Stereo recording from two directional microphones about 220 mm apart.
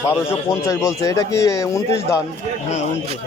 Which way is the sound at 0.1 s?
15° left (ahead or behind).